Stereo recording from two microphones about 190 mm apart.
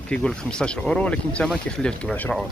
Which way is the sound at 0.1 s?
5° left (ahead or behind).